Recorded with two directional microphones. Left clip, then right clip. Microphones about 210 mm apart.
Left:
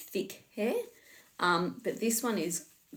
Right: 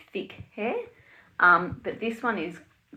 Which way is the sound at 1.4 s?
40° left (ahead or behind).